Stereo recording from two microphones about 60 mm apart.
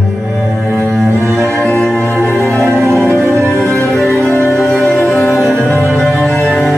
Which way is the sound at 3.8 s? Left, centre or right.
Centre.